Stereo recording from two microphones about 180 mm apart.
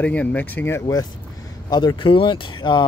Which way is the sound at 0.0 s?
5° left (ahead or behind).